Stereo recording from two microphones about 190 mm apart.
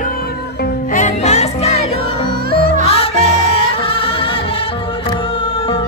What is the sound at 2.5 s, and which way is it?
Music, 45° right (ahead or behind).